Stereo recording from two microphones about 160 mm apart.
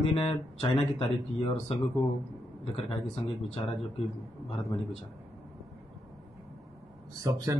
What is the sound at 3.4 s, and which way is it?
Speech, 40° left (ahead or behind).